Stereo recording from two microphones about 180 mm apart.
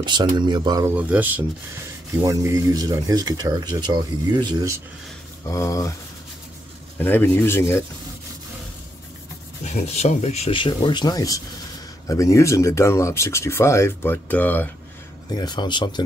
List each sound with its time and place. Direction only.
0.0 s speech: 25° right (ahead or behind)
0.9 s speech: 10° right (ahead or behind)
5.5 s speech: 15° left (ahead or behind)
7.0 s speech: 10° left (ahead or behind)
9.7 s speech: 40° left (ahead or behind); by 14.7 s 10° left (ahead or behind)
15.3 s speech: 25° left (ahead or behind)